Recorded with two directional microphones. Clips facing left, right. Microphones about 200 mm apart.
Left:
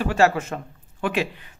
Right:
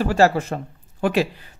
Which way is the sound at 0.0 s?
35° right (ahead or behind).